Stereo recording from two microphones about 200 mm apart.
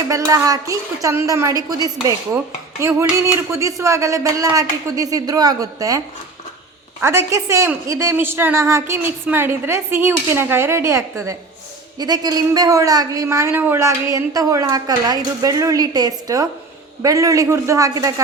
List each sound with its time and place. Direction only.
0.1 s a man's voice: 15° right (ahead or behind)
3.5 s a man's voice: 15° right (ahead or behind)
7.0 s a man's voice: 15° right (ahead or behind)